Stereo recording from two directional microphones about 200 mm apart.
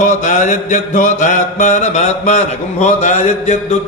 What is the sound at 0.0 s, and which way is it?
Mantra, 40° left (ahead or behind).